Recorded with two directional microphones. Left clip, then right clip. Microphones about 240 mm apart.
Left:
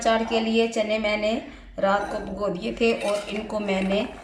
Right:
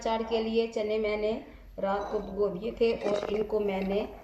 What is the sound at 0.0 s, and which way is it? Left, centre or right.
Speech, left.